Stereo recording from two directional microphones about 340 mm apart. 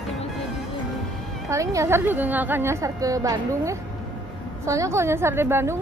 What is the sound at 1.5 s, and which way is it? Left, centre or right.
A woman's voice, centre.